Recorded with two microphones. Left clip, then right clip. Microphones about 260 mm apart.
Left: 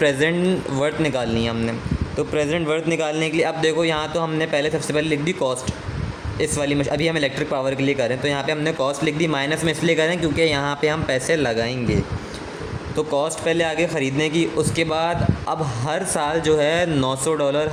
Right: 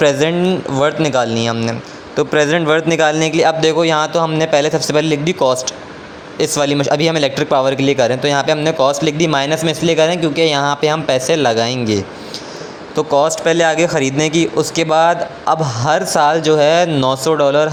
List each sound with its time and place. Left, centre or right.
0.0 s speech: centre